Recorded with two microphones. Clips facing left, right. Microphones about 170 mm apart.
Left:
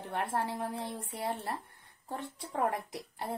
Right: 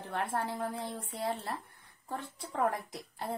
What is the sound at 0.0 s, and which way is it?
Speech, 20° left (ahead or behind).